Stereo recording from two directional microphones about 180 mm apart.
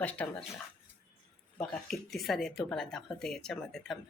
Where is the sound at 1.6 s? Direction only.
5° left (ahead or behind).